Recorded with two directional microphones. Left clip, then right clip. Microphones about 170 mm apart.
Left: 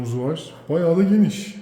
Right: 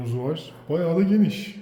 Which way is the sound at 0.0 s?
25° left (ahead or behind).